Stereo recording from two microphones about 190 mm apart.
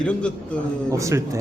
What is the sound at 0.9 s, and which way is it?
Speech, 15° right (ahead or behind).